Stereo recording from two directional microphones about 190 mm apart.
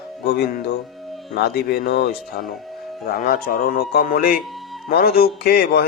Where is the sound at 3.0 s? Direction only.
50° left (ahead or behind).